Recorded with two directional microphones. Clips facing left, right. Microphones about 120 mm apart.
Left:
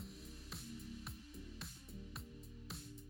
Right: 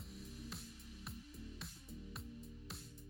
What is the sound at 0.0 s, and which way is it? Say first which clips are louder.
Music: right 2 dB; centre (ahead or behind).